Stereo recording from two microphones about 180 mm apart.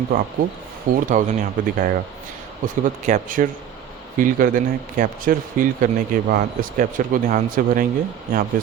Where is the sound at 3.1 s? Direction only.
45° right (ahead or behind).